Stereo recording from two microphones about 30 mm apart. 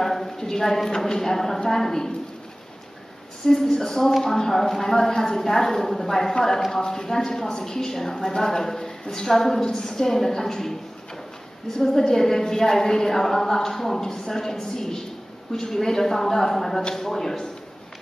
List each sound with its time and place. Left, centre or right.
0.0 s a woman's voice: centre
3.7 s a woman's voice: centre
11.8 s a woman's voice: centre